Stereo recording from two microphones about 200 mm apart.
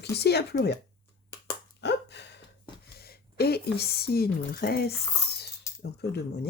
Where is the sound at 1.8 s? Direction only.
60° left (ahead or behind).